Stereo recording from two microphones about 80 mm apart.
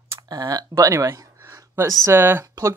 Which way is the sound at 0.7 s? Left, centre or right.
Right.